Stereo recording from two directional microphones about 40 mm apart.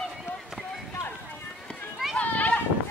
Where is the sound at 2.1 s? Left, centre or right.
Left.